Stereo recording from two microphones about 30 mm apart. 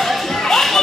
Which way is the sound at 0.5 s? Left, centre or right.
Centre.